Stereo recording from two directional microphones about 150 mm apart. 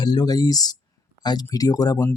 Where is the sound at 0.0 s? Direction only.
30° left (ahead or behind).